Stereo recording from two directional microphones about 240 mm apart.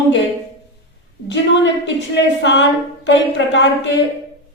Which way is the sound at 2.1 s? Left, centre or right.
Left.